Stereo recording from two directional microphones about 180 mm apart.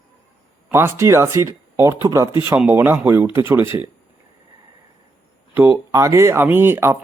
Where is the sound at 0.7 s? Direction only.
15° right (ahead or behind).